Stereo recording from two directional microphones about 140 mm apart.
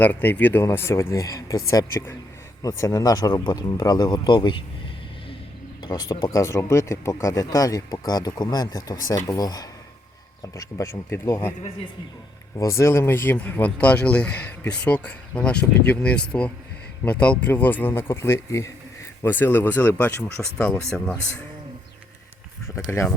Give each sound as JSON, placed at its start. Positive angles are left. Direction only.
{"t": 0.0, "sound": "speech", "side_deg": 15}
{"t": 5.8, "sound": "speech", "side_deg": 30}
{"t": 12.5, "sound": "speech", "side_deg": 20}
{"t": 22.7, "sound": "speech", "side_deg": 20}